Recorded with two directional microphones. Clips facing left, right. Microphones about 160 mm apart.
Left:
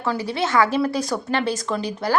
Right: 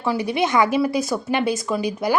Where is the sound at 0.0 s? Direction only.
15° right (ahead or behind).